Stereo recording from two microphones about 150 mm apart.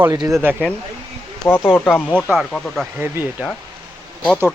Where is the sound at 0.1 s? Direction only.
20° right (ahead or behind).